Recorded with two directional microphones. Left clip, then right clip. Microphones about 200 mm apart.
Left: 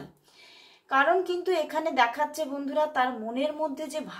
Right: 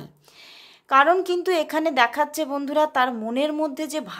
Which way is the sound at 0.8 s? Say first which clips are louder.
Right 6 dB; 50° right (ahead or behind).